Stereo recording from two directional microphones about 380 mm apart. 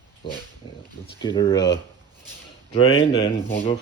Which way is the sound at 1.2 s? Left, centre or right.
Centre.